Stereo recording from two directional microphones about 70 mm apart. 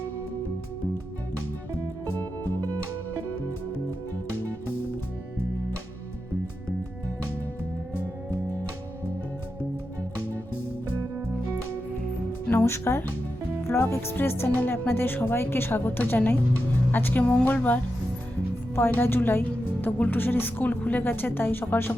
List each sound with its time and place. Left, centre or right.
12.6 s a woman's voice: left
18.8 s a woman's voice: left